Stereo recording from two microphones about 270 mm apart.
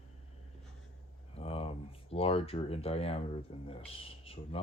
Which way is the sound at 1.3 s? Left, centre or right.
Left.